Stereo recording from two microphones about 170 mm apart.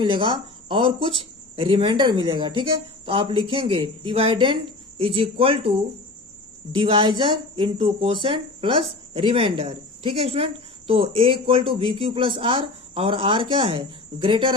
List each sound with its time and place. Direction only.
0.0 s speech: 30° right (ahead or behind)